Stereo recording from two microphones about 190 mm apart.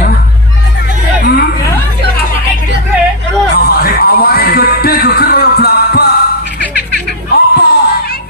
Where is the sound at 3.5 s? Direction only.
55° left (ahead or behind).